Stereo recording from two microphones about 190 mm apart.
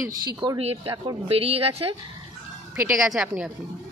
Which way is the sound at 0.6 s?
30° right (ahead or behind).